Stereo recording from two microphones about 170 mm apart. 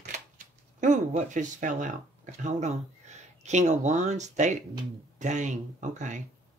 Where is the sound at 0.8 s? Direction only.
45° right (ahead or behind).